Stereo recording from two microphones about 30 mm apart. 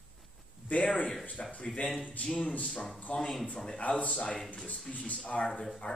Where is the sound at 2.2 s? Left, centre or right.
Left.